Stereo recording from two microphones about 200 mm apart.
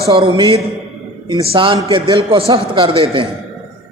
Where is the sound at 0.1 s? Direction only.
25° right (ahead or behind).